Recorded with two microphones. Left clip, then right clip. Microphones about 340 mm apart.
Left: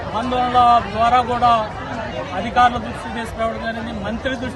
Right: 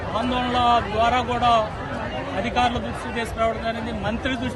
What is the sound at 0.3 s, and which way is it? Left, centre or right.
A man's voice, centre.